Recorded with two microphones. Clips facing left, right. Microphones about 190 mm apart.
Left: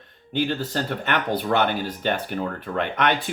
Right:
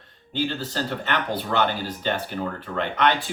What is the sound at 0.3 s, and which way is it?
Speech, 55° left (ahead or behind).